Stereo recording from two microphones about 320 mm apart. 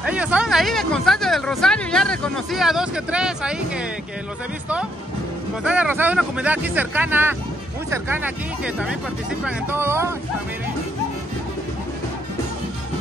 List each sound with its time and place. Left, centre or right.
0.0 s speech: centre
5.6 s speech: centre
9.4 s speech: centre